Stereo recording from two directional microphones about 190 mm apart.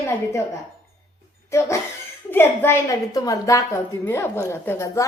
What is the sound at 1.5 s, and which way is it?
A woman's voice, 15° left (ahead or behind).